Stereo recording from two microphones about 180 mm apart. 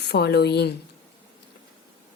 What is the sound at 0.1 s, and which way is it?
Speech, 65° left (ahead or behind).